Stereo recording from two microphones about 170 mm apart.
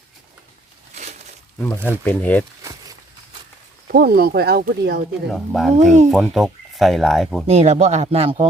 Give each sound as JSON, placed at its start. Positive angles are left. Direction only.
{"t": 1.5, "sound": "speech", "side_deg": 10}
{"t": 3.8, "sound": "speech", "side_deg": -65}
{"t": 5.3, "sound": "speech", "side_deg": 0}
{"t": 5.7, "sound": "speech", "side_deg": -45}
{"t": 6.1, "sound": "speech", "side_deg": -5}
{"t": 7.4, "sound": "speech", "side_deg": -40}